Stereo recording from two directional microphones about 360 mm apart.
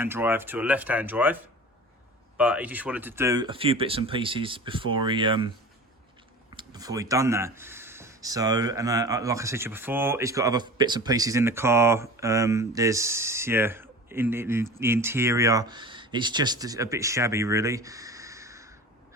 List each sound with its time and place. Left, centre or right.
0.0 s speech: centre
2.4 s speech: centre
6.6 s speech: centre